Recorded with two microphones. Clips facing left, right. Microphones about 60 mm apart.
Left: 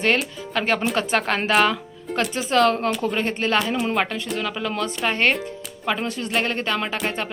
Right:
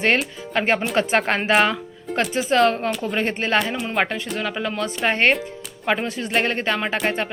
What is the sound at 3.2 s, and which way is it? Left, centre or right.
Speech, right.